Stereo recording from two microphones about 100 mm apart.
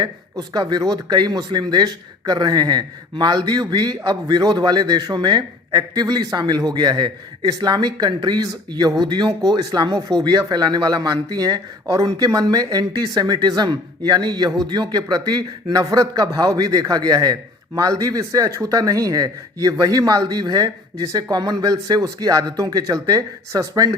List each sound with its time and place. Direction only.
0.0 s a man's voice: 45° right (ahead or behind)